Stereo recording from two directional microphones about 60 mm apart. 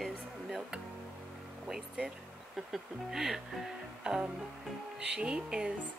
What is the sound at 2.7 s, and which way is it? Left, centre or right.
Speech, centre.